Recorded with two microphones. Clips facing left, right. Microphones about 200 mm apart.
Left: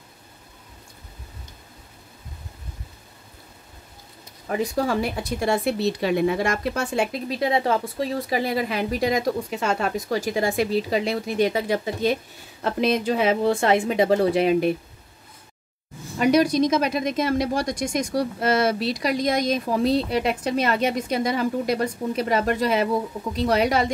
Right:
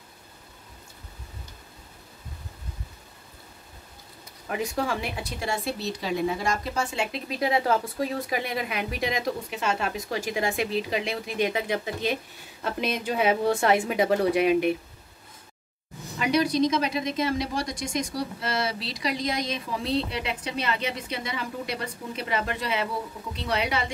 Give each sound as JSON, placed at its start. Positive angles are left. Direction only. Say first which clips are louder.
{"t": 4.5, "sound": "speech", "louder": "left 5 dB", "side_deg": 40}
{"t": 7.2, "sound": "speech", "louder": "right 1 dB", "side_deg": 25}
{"t": 16.2, "sound": "speech", "louder": "left 5 dB", "side_deg": 45}